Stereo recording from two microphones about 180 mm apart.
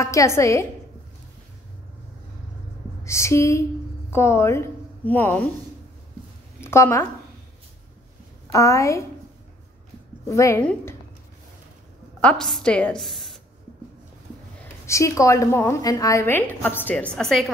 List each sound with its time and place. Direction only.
0.0 s a woman's voice: 15° left (ahead or behind)
3.0 s a woman's voice: 15° left (ahead or behind)
6.6 s speech: 15° left (ahead or behind)
8.5 s a woman's voice: 15° left (ahead or behind)
10.3 s a woman's voice: 15° left (ahead or behind)
12.2 s a woman's voice: 5° left (ahead or behind)
14.9 s a woman's voice: 15° left (ahead or behind)